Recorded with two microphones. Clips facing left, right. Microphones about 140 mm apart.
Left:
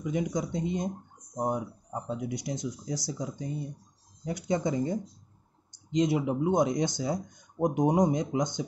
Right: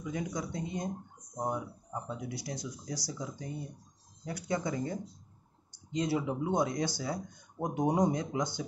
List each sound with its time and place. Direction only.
0.0 s speech: 20° left (ahead or behind)